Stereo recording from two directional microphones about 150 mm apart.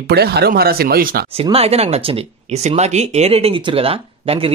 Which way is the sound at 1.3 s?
40° right (ahead or behind).